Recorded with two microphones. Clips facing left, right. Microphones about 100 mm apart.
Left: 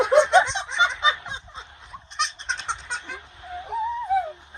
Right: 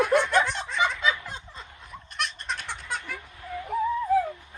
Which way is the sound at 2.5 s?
25° left (ahead or behind).